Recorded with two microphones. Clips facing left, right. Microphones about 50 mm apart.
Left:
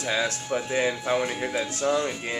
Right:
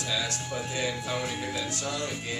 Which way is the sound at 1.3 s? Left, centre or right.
Centre.